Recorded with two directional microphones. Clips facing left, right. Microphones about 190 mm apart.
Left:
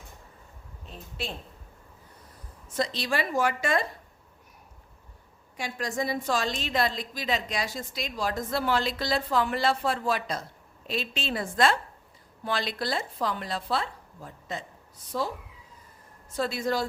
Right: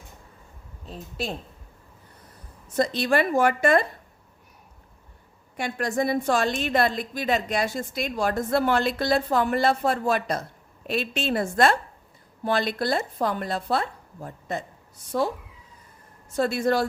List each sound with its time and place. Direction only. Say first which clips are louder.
0.9 s speech: right 5 dB; 40° right (ahead or behind)
2.7 s a woman's voice: right 6 dB; 50° right (ahead or behind)
5.5 s a woman's voice: right 5 dB; 60° right (ahead or behind)
16.3 s speech: right 5 dB; 50° right (ahead or behind)